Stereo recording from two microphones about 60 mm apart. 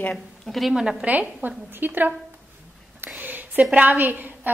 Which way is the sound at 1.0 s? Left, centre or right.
Right.